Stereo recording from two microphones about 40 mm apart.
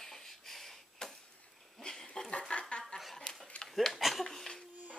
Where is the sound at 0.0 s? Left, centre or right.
Centre.